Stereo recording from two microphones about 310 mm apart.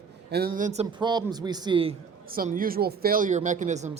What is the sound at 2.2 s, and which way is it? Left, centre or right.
Speech, right.